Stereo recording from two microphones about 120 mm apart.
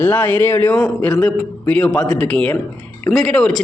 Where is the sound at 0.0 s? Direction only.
15° left (ahead or behind).